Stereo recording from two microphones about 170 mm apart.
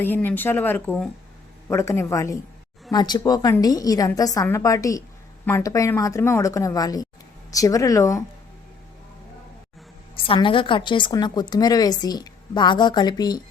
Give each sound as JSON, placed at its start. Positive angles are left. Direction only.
{"t": 0.0, "sound": "a woman's voice", "side_deg": 10}
{"t": 10.2, "sound": "a woman's voice", "side_deg": 30}